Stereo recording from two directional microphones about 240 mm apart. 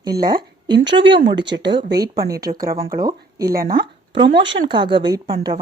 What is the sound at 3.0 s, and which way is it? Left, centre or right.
Speech, centre.